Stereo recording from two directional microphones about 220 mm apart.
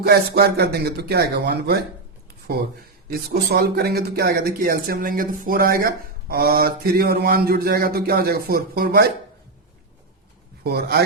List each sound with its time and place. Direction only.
0.0 s speech: 45° right (ahead or behind)
3.1 s speech: 45° right (ahead or behind)
10.6 s speech: 45° right (ahead or behind)